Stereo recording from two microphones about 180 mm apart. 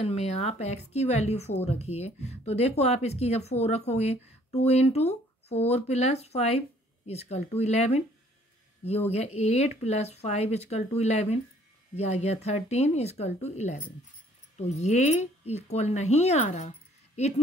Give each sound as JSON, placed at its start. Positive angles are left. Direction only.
{"t": 0.0, "sound": "a woman's voice", "side_deg": 35}
{"t": 9.1, "sound": "a woman's voice", "side_deg": 35}